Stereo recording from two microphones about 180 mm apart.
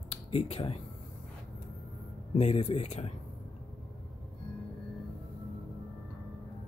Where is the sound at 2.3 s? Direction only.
40° left (ahead or behind).